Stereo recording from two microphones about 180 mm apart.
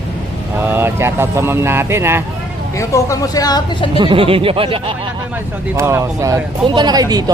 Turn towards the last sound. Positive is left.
turn(degrees=-20)  # may be behind; listen again after turning